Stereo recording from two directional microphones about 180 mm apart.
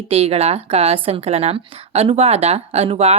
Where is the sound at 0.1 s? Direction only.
35° right (ahead or behind).